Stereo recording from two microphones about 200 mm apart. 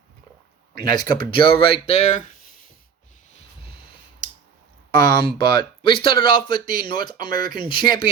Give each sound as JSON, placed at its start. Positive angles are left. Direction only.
{"t": 0.9, "sound": "speech", "side_deg": 25}
{"t": 4.9, "sound": "speech", "side_deg": 20}